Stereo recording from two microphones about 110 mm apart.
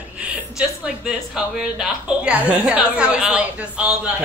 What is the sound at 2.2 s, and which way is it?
A woman's voice, 10° right (ahead or behind).